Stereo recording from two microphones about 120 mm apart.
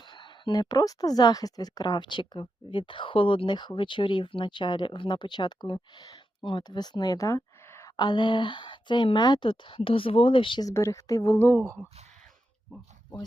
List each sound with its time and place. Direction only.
0.0 s a woman's voice: 40° left (ahead or behind); by 7.9 s 25° left (ahead or behind)
7.9 s speech: 40° left (ahead or behind)
10.7 s a woman's voice: 25° left (ahead or behind)